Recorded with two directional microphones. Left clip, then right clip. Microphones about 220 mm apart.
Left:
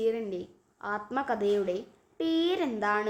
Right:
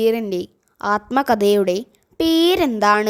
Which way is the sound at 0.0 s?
50° right (ahead or behind).